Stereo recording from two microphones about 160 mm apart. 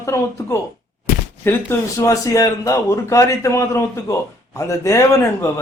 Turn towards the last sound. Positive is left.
turn(degrees=20)  # may be behind; listen again after turning